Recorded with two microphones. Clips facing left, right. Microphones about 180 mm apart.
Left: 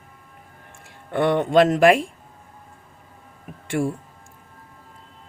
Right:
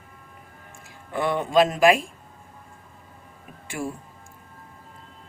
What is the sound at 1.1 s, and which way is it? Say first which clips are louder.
Speech: left 5 dB; 65° left (ahead or behind).